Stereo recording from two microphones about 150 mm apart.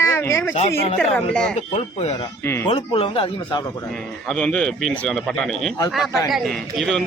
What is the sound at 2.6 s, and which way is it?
Speech, 40° left (ahead or behind).